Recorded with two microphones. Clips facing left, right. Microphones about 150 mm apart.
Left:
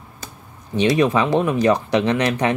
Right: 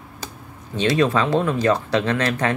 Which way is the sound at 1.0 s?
15° left (ahead or behind).